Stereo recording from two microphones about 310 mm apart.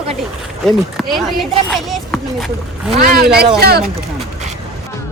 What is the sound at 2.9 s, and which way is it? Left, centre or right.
Speech, right.